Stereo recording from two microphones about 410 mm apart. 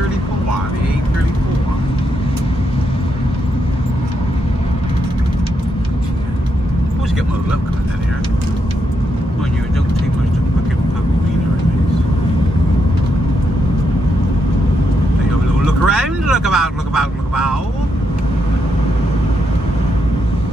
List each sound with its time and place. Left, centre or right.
15.6 s vehicle: centre